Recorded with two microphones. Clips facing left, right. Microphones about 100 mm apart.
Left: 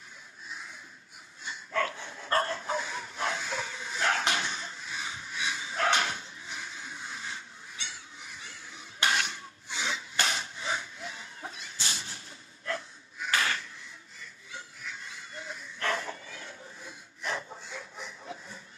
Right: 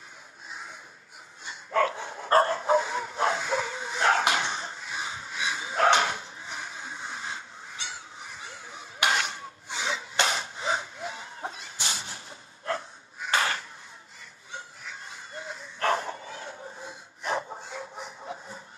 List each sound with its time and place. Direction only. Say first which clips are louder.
1.7 s bow-wow: right 6 dB; 30° right (ahead or behind)
9.1 s wood: right 3 dB; 35° right (ahead or behind)
10.2 s a sound: right 5 dB; 35° right (ahead or behind)
15.0 s bow-wow: right 3 dB; 30° right (ahead or behind)